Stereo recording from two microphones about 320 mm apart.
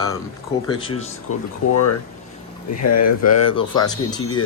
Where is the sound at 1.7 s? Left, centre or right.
Left.